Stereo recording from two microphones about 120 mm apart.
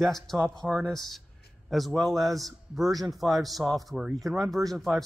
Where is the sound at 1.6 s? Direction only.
Centre (ahead or behind).